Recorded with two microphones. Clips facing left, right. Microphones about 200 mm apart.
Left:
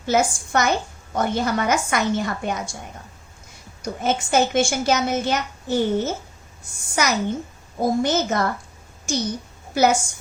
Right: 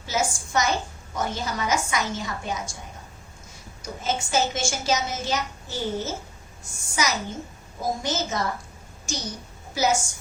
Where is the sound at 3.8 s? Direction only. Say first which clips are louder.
Left 5 dB; 60° left (ahead or behind).